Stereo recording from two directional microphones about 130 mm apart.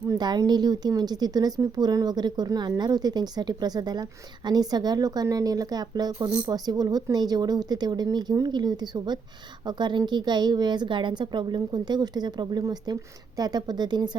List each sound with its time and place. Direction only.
0.1 s speech: 30° right (ahead or behind)